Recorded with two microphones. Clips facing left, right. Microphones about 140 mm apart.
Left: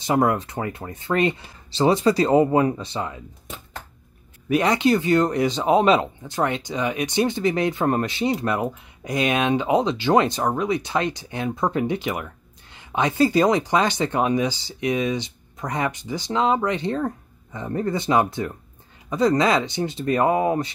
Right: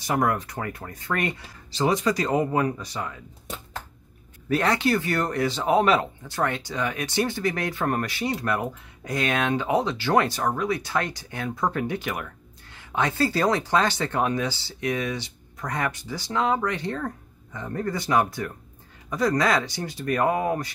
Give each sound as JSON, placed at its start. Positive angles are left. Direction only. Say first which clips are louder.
{"t": 0.0, "sound": "speech", "louder": "left 4 dB", "side_deg": 20}
{"t": 4.5, "sound": "speech", "louder": "left 4 dB", "side_deg": 15}